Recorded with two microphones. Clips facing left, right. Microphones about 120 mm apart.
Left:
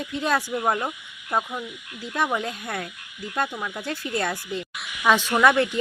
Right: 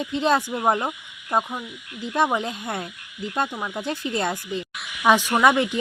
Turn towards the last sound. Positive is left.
turn(degrees=-15)  # may be behind; listen again after turning